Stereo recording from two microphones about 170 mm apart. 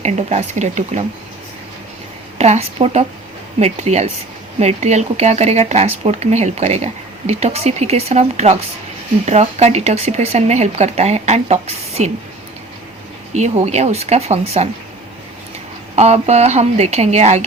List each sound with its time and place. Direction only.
0.0 s speech: 40° right (ahead or behind)
2.4 s speech: 40° right (ahead or behind)
13.3 s speech: 40° right (ahead or behind)
16.0 s speech: 40° right (ahead or behind)